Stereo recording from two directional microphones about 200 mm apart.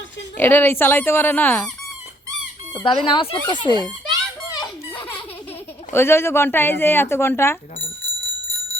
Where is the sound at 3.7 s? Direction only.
20° right (ahead or behind).